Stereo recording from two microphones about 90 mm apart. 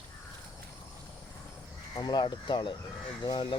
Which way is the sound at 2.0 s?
50° left (ahead or behind).